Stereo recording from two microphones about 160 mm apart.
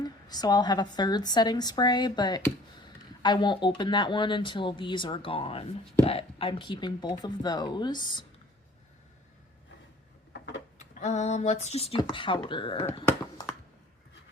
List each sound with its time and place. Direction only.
0.0 s a woman's voice: 25° left (ahead or behind)
10.8 s speech: 45° left (ahead or behind); by 12.8 s 30° left (ahead or behind)